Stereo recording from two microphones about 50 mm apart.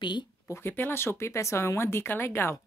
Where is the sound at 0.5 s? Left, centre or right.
Left.